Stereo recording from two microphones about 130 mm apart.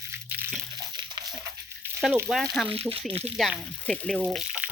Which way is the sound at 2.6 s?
45° right (ahead or behind).